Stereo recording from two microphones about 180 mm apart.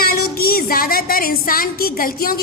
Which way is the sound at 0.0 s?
55° left (ahead or behind).